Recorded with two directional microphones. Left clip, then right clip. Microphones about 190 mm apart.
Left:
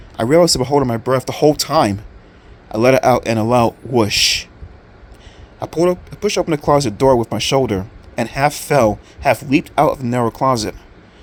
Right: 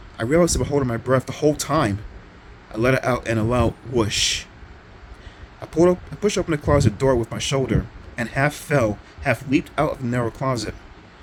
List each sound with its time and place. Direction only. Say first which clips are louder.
0.2 s speech: left 7 dB; 30° left (ahead or behind)
5.5 s speech: left 2 dB; 30° left (ahead or behind)